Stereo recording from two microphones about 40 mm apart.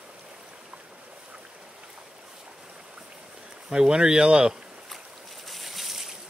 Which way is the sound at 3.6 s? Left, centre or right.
Right.